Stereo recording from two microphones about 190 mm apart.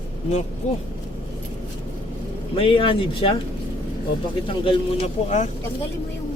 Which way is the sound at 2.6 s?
30° left (ahead or behind).